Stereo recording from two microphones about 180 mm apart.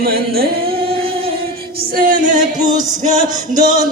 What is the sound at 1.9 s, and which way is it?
Music, 50° right (ahead or behind).